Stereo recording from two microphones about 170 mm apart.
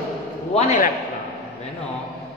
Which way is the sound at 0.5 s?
45° left (ahead or behind).